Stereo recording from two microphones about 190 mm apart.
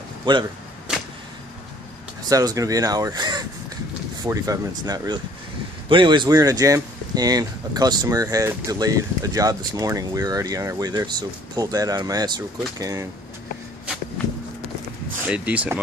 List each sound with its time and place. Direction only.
0.2 s speech: 25° right (ahead or behind)
0.9 s arrow: 5° right (ahead or behind)
2.2 s speech: 20° right (ahead or behind)
15.2 s speech: 5° right (ahead or behind)